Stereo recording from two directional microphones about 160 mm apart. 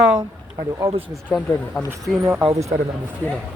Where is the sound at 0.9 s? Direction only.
35° right (ahead or behind).